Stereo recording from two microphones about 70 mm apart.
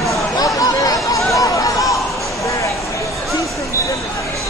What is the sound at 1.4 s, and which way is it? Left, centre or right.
Chatter, left.